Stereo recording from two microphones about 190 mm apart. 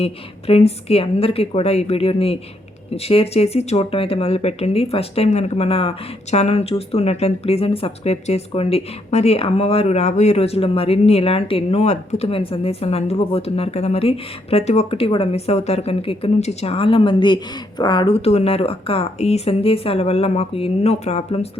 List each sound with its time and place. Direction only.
0.0 s speech: 30° left (ahead or behind)